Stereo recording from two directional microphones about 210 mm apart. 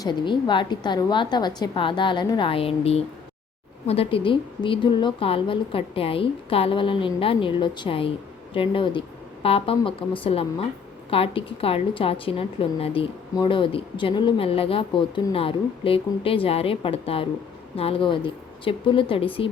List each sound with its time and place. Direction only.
0.0 s a woman's voice: 20° left (ahead or behind)